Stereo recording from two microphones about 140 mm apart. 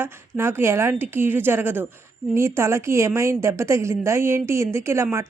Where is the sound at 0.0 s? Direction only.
15° right (ahead or behind).